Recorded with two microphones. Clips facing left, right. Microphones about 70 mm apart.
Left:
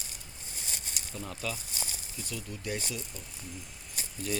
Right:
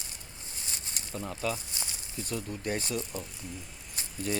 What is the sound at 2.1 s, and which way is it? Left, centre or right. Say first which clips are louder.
Speech: right 6 dB; right.